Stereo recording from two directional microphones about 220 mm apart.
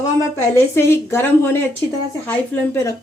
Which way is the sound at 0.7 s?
10° left (ahead or behind).